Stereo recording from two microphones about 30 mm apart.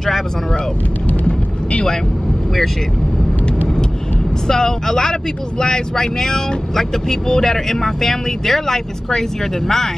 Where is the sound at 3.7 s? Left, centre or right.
Left.